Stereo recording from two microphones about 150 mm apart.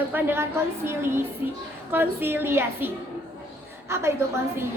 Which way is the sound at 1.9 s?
15° right (ahead or behind).